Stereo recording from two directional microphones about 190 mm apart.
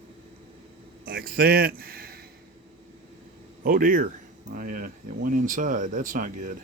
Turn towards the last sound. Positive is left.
turn(degrees=-45)  # may be behind; listen again after turning